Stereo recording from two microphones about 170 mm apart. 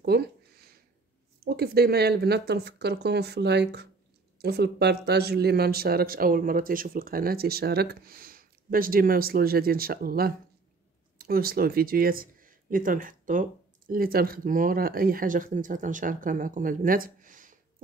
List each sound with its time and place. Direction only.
0.0 s a sound: 70° right (ahead or behind)
1.4 s speech: 65° right (ahead or behind)
4.4 s speech: 70° right (ahead or behind); by 17.8 s 50° right (ahead or behind)